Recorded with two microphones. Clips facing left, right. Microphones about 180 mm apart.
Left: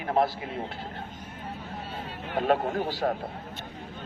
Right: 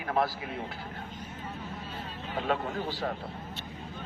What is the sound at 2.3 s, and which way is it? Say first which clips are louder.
Speech: left 6 dB; 50° left (ahead or behind).